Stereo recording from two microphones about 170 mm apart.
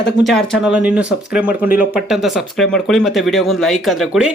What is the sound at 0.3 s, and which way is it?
Speech, centre (ahead or behind).